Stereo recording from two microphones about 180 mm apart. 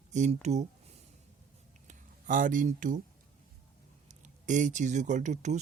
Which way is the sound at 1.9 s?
45° right (ahead or behind).